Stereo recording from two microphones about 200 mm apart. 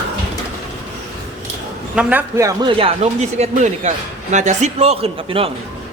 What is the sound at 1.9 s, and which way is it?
A man's voice, 5° right (ahead or behind).